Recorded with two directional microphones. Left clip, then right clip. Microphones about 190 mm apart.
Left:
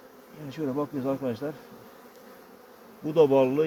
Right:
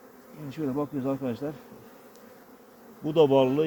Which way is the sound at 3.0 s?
20° right (ahead or behind).